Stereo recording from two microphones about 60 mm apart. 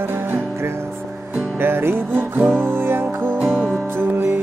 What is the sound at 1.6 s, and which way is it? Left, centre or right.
Music, right.